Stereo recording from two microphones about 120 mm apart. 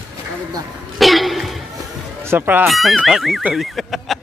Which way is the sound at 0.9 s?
Centre (ahead or behind).